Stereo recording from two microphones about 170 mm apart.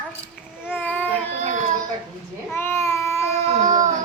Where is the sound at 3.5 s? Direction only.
45° right (ahead or behind).